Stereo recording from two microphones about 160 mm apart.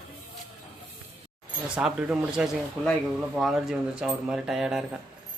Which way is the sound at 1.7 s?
5° right (ahead or behind).